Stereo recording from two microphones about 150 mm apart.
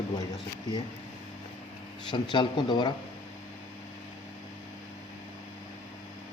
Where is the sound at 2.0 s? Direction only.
30° left (ahead or behind).